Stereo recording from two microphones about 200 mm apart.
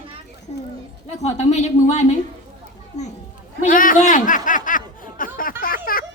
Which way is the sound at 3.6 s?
45° left (ahead or behind).